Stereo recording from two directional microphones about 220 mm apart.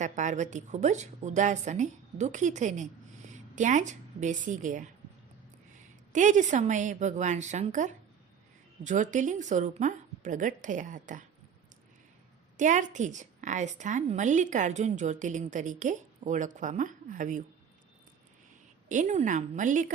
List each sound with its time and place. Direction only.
0.0 s a woman's voice: 35° right (ahead or behind)
6.1 s a woman's voice: 35° right (ahead or behind)
12.5 s a woman's voice: 35° right (ahead or behind)
18.9 s a woman's voice: 35° right (ahead or behind)